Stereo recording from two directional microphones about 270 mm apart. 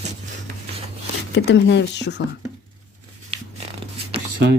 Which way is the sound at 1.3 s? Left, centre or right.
Left.